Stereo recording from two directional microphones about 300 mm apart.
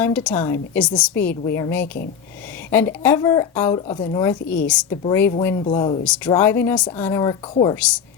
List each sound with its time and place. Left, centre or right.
0.0 s a woman's voice: centre